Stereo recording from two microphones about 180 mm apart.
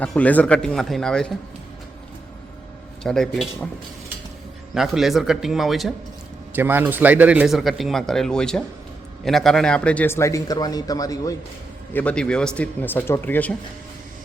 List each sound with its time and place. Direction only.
0.0 s speech: 5° left (ahead or behind)
3.0 s speech: 5° left (ahead or behind)
4.7 s speech: centre (ahead or behind)
6.5 s speech: 10° right (ahead or behind); by 11.3 s 20° left (ahead or behind)
11.9 s speech: 5° left (ahead or behind)